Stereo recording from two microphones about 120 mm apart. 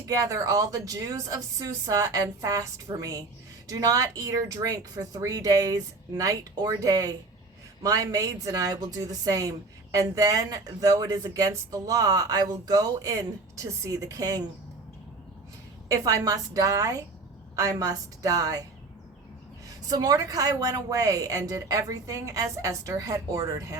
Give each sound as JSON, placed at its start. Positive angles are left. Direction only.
{"t": 0.0, "sound": "a woman's voice", "side_deg": -30}
{"t": 15.9, "sound": "a woman's voice", "side_deg": -30}
{"t": 19.6, "sound": "a woman's voice", "side_deg": -30}